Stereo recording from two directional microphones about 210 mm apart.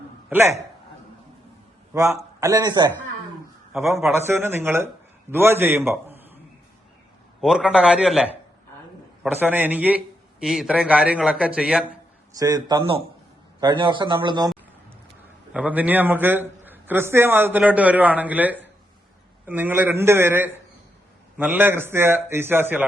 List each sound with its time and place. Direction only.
0.3 s a man's voice: 10° right (ahead or behind)
1.9 s a man's voice: 15° right (ahead or behind)
3.7 s a man's voice: centre (ahead or behind)
4.1 s a man's voice: 10° right (ahead or behind)
7.4 s a man's voice: 5° right (ahead or behind)
12.4 s a man's voice: 20° right (ahead or behind)
15.5 s a man's voice: 5° right (ahead or behind)